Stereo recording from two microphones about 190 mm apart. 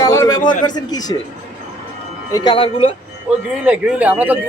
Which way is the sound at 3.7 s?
5° right (ahead or behind).